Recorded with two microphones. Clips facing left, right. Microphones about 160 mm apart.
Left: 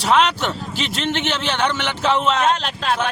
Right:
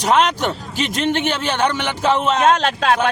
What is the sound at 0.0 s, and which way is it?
A man's voice, 45° right (ahead or behind).